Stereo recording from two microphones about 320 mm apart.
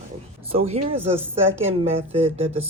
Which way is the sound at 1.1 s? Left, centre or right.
Centre.